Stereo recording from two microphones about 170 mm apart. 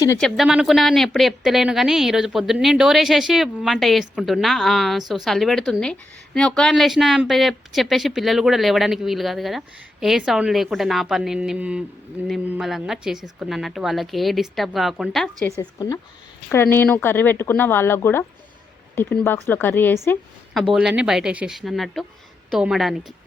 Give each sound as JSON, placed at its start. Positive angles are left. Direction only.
{"t": 0.2, "sound": "a woman's voice", "side_deg": 0}
{"t": 15.4, "sound": "a woman's voice", "side_deg": 20}
{"t": 20.7, "sound": "a woman's voice", "side_deg": -5}